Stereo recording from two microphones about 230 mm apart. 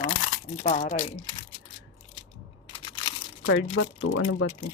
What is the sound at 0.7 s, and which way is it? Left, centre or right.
Speech, left.